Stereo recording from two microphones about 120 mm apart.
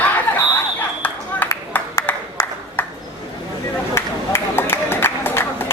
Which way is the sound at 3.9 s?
20° left (ahead or behind).